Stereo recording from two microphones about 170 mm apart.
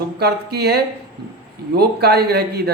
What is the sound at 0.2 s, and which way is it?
Speech, 70° right (ahead or behind).